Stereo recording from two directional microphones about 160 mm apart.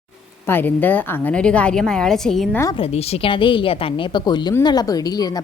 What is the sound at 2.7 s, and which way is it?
A woman's voice, 40° left (ahead or behind).